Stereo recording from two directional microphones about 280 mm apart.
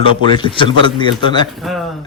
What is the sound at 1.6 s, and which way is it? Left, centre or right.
Speech, centre.